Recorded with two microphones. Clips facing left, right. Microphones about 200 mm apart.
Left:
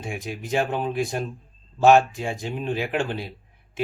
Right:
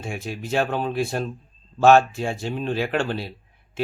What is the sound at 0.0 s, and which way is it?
Speech, 15° left (ahead or behind).